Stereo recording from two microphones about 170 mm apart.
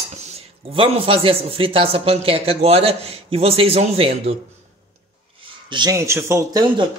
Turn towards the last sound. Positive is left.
turn(degrees=-25)  # may be behind; listen again after turning